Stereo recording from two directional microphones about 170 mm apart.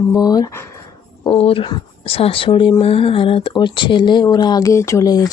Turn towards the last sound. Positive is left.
turn(degrees=20)  # may be behind; listen again after turning